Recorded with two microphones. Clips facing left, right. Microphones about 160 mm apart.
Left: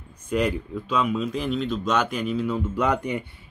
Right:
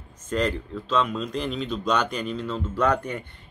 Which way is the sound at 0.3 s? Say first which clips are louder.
Left 2 dB; 10° left (ahead or behind).